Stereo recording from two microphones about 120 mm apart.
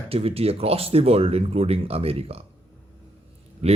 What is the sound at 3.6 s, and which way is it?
Speech, 55° right (ahead or behind).